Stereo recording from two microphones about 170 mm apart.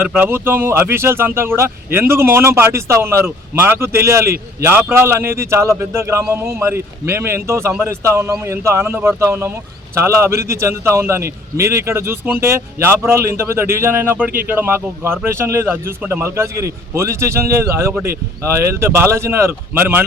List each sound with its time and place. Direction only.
0.1 s a man's voice: 10° right (ahead or behind)